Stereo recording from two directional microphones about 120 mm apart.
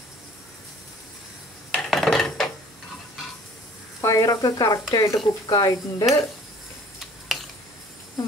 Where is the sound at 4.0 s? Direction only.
25° left (ahead or behind).